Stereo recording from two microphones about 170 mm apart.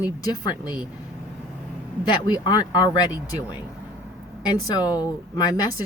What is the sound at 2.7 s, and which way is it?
Speech, 25° left (ahead or behind).